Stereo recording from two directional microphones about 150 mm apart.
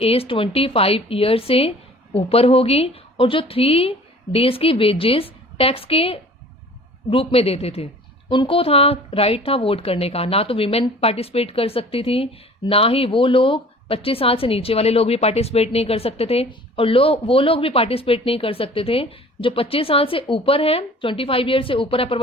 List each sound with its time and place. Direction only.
0.0 s a woman's voice: 40° left (ahead or behind)